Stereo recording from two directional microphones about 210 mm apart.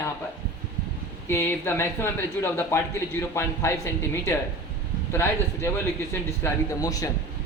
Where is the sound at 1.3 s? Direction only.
10° left (ahead or behind).